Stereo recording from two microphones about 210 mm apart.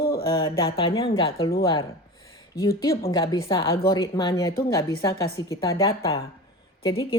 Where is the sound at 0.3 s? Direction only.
20° left (ahead or behind).